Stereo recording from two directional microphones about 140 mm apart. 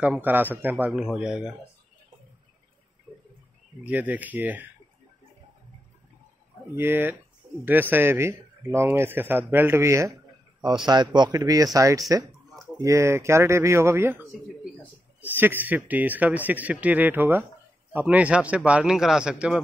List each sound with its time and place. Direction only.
0.0 s speech: 10° right (ahead or behind)
3.1 s a sound: 10° left (ahead or behind)
3.8 s speech: 10° right (ahead or behind)
6.7 s speech: 15° right (ahead or behind)
10.9 s speech: 30° right (ahead or behind); by 14.2 s 15° right (ahead or behind)
15.2 s speech: 15° right (ahead or behind)